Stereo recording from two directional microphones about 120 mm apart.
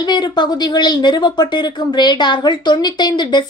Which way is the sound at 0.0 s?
35° left (ahead or behind).